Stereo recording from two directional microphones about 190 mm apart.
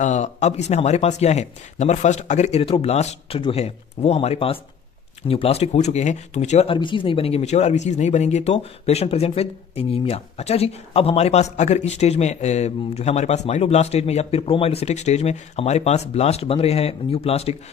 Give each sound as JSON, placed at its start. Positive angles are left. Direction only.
{"t": 0.0, "sound": "speech", "side_deg": 35}